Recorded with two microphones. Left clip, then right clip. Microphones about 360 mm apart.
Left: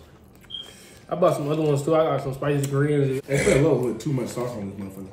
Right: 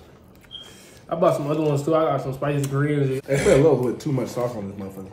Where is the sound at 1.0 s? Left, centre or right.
Centre.